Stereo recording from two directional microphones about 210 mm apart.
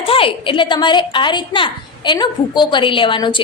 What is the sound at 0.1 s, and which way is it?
A woman's voice, 25° left (ahead or behind).